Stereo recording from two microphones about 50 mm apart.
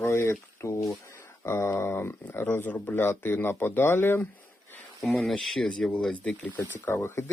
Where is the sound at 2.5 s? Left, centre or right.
Left.